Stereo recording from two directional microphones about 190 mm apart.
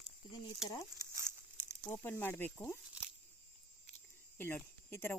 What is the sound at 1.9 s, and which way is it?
Speech, 10° left (ahead or behind).